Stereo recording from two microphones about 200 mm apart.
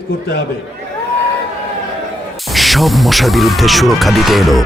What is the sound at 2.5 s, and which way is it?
Speech, centre (ahead or behind).